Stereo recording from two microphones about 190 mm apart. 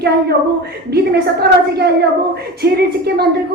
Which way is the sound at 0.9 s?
55° right (ahead or behind).